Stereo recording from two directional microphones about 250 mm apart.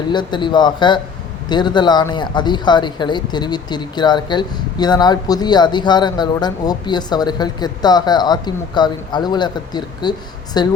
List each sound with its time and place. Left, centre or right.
0.1 s speech: centre